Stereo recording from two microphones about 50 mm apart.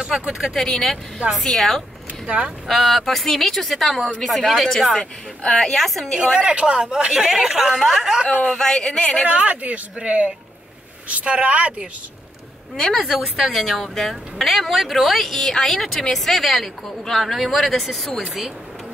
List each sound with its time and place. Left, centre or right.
0.3 s speech: centre
0.6 s speech: centre
2.2 s speech: right
2.7 s speech: centre
6.2 s a man's voice: centre
7.1 s a woman's voice: centre
8.3 s a woman's voice: left
8.5 s speech: centre
9.2 s a man's voice: right
12.7 s speech: centre